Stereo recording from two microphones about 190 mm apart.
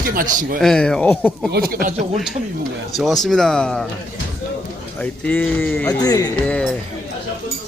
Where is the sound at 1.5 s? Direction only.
50° right (ahead or behind).